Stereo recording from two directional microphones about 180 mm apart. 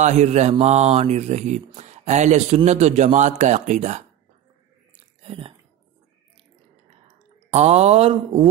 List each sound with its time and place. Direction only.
0.0 s speech: 40° right (ahead or behind)
4.9 s a sound: 30° right (ahead or behind)
7.5 s speech: 35° right (ahead or behind)